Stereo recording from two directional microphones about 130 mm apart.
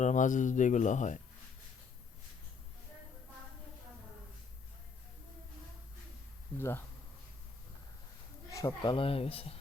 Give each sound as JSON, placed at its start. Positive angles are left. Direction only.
{"t": 0.0, "sound": "speech", "side_deg": 75}
{"t": 6.6, "sound": "speech", "side_deg": 20}
{"t": 8.4, "sound": "a sound", "side_deg": 25}
{"t": 8.8, "sound": "speech", "side_deg": 40}